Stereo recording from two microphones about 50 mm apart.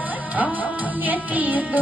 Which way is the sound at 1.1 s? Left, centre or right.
Right.